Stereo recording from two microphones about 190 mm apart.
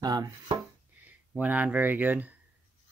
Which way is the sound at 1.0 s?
10° right (ahead or behind).